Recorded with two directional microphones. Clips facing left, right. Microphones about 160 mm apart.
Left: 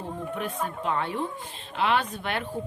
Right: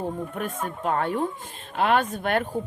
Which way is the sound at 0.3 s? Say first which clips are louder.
Right 1 dB; 50° right (ahead or behind).